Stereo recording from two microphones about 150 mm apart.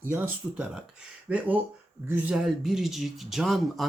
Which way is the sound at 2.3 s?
Centre (ahead or behind).